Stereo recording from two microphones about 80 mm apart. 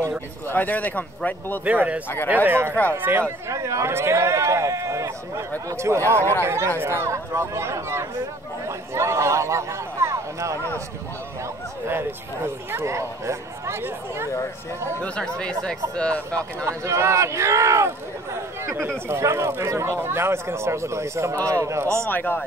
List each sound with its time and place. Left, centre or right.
0.5 s speech: left
1.6 s speech: centre
2.7 s speech: left
3.0 s speech: right
3.5 s speech: right
12.7 s speech: right
15.1 s speech: centre
16.6 s speech: right
22.1 s speech: left